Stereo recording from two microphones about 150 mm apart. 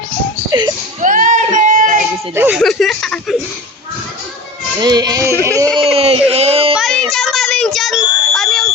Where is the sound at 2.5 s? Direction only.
Centre (ahead or behind).